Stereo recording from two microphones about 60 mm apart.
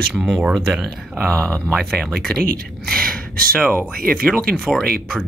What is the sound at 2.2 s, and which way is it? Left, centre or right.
Speech, centre.